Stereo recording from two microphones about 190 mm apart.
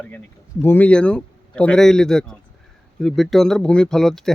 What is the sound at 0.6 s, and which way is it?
Speech, 10° left (ahead or behind).